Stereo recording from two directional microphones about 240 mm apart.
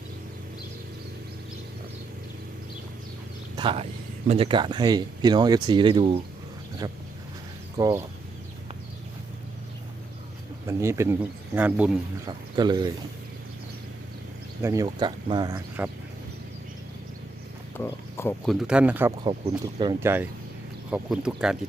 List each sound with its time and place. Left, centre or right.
3.5 s a sound: centre
4.3 s speech: right
7.8 s speech: centre
10.7 s speech: centre
14.6 s speech: centre
17.7 s a sound: centre
18.4 s speech: centre